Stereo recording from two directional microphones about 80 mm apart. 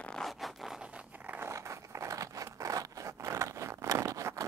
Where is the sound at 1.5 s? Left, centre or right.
Right.